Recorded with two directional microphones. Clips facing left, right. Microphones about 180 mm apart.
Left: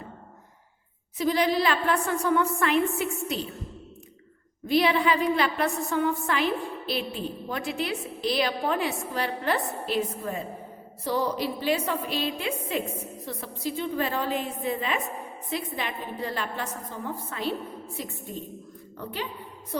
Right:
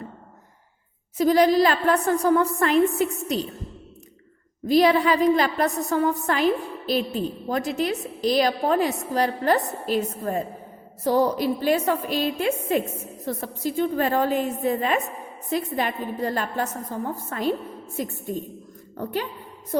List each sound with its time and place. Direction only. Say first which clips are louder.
1.2 s a woman's voice: right 6 dB; 45° right (ahead or behind)
4.6 s a woman's voice: right 5 dB; 40° right (ahead or behind)